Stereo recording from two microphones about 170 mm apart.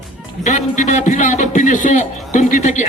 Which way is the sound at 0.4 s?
45° left (ahead or behind).